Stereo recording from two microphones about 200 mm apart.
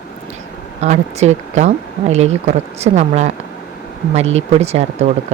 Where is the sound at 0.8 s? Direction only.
35° right (ahead or behind).